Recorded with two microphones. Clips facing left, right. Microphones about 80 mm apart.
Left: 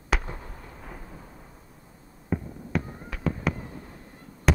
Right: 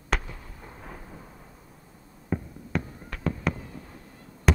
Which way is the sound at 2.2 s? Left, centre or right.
Centre.